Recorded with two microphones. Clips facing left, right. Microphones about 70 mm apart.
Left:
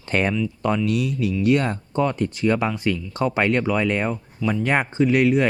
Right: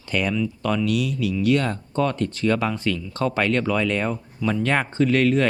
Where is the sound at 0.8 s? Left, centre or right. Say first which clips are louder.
Left 1 dB; left.